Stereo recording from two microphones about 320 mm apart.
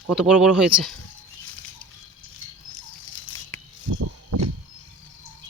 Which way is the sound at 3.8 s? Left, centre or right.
Right.